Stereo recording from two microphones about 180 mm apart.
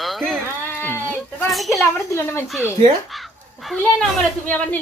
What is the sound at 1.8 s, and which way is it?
Speech, 15° left (ahead or behind).